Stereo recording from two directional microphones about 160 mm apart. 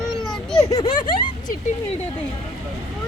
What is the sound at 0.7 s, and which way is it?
Speech, 25° left (ahead or behind).